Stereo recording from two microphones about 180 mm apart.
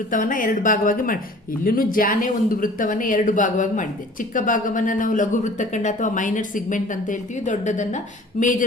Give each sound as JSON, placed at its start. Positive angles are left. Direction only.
{"t": 0.1, "sound": "speech", "side_deg": 45}